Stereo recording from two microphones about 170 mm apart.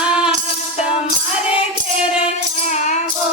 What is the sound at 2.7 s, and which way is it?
Music, 45° left (ahead or behind).